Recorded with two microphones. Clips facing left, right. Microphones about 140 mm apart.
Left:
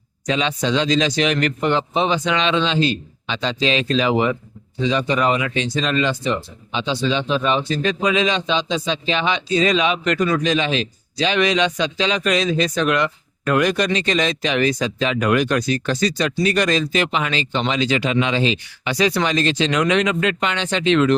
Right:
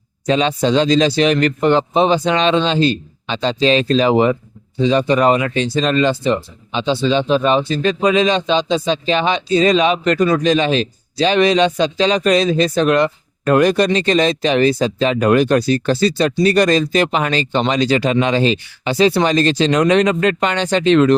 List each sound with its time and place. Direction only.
0.3 s speech: 35° right (ahead or behind)
18.9 s speech: 30° right (ahead or behind)